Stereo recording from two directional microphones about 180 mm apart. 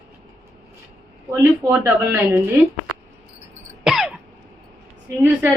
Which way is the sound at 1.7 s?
10° right (ahead or behind).